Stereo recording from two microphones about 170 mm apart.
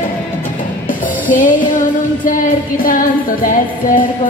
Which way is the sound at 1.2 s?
50° left (ahead or behind).